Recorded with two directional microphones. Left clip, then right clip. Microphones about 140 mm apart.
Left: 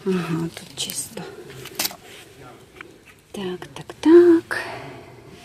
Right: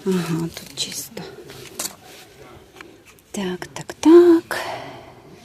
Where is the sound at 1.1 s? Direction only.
5° left (ahead or behind).